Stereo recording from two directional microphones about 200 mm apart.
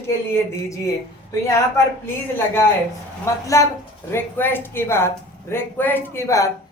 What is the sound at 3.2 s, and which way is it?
Speech, 15° left (ahead or behind).